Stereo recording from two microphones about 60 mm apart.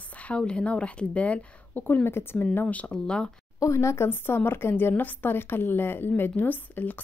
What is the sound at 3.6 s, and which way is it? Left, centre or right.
Speech, left.